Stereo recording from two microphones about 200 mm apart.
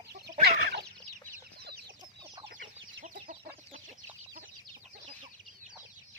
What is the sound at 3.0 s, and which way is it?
Chicken, 45° right (ahead or behind).